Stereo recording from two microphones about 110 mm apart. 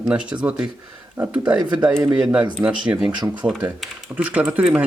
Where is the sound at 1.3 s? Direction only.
40° right (ahead or behind).